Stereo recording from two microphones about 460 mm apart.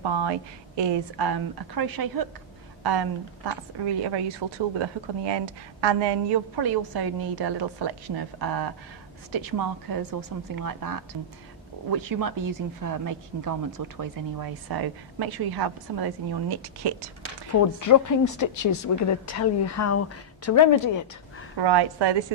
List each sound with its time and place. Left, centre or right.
0.0 s a woman's voice: right
17.5 s a woman's voice: left
21.6 s a woman's voice: right